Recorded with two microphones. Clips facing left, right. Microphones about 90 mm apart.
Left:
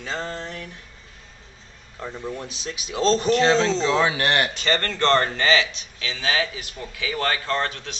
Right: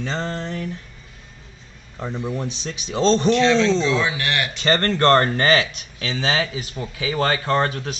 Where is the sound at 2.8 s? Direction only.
5° left (ahead or behind).